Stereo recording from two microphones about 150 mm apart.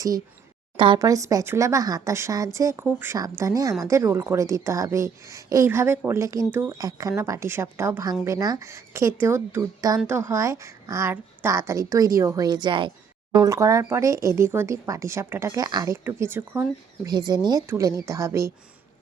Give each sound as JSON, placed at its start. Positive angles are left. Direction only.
{"t": 0.9, "sound": "a woman's voice", "side_deg": -20}